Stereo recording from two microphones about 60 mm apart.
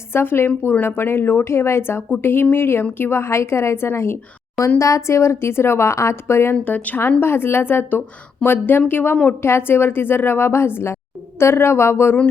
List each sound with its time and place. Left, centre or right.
0.1 s a woman's voice: left
4.8 s a woman's voice: left
6.7 s a woman's voice: left
7.2 s a woman's voice: left